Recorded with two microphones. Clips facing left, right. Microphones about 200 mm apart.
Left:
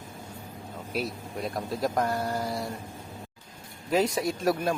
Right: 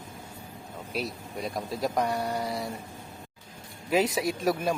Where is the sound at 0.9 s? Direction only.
Centre (ahead or behind).